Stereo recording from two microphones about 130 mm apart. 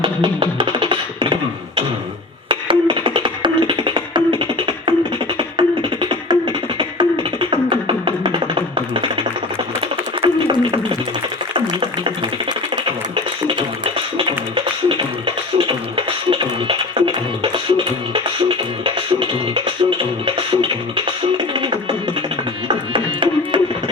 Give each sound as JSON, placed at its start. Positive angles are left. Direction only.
{"t": 0.0, "sound": "beatboxing", "side_deg": -40}
{"t": 2.5, "sound": "music", "side_deg": -40}
{"t": 7.5, "sound": "music", "side_deg": -40}
{"t": 8.9, "sound": "a sound", "side_deg": -40}
{"t": 14.2, "sound": "music", "side_deg": -40}